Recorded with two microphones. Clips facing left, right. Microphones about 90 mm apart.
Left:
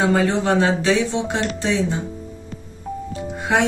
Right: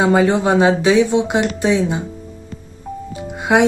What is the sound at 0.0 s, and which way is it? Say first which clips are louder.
Speech: right 4 dB; 15° right (ahead or behind).